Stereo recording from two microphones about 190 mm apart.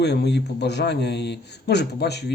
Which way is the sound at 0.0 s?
65° left (ahead or behind).